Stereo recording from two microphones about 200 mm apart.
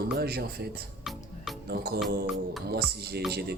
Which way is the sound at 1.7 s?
50° right (ahead or behind).